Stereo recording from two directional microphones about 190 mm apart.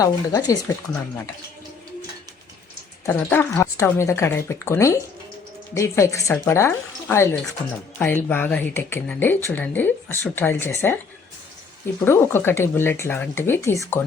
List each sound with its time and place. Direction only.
0.0 s speech: 20° left (ahead or behind)
3.1 s speech: 10° left (ahead or behind)
12.0 s speech: 15° left (ahead or behind)